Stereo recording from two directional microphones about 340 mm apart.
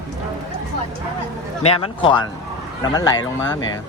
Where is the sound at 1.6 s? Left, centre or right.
Centre.